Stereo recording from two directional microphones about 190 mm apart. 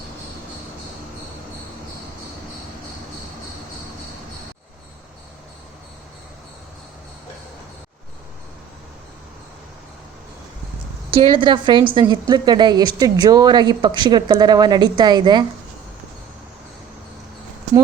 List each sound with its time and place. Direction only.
11.1 s a woman's voice: 30° right (ahead or behind)